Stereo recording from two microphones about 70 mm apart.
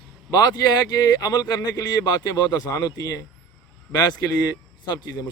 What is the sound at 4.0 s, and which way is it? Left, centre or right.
A man's voice, left.